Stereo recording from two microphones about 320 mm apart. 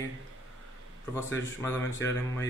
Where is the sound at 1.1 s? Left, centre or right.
Centre.